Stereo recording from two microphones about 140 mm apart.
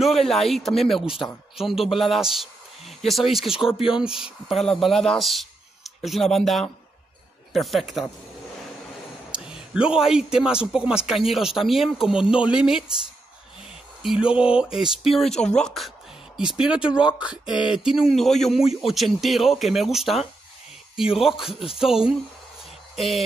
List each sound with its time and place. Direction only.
0.0 s speech: centre (ahead or behind)
9.3 s speech: 5° right (ahead or behind)
14.0 s speech: 5° right (ahead or behind)
22.9 s a sound: centre (ahead or behind)